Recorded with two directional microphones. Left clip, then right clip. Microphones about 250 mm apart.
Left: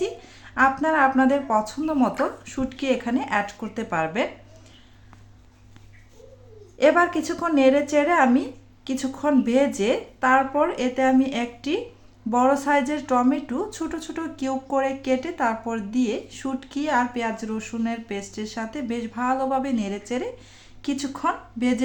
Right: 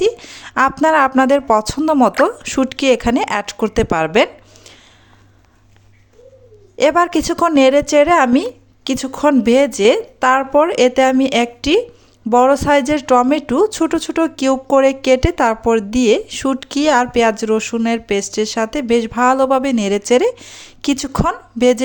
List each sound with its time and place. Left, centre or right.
0.0 s speech: right
6.7 s speech: right